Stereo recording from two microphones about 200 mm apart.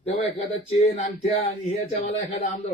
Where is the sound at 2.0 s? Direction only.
40° left (ahead or behind).